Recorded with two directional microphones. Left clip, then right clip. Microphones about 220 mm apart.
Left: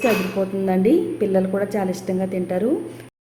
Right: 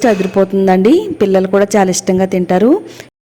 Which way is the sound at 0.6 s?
45° right (ahead or behind).